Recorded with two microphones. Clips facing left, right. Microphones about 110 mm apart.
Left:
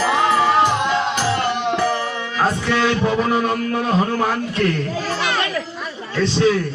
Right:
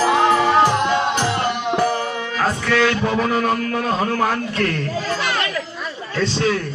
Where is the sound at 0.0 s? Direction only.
40° right (ahead or behind).